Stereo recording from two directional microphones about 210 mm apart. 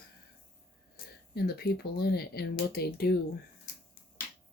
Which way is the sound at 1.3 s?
50° left (ahead or behind).